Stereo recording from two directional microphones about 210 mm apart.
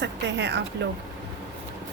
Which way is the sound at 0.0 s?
55° right (ahead or behind).